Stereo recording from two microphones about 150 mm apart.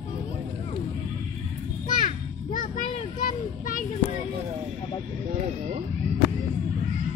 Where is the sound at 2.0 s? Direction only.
65° left (ahead or behind).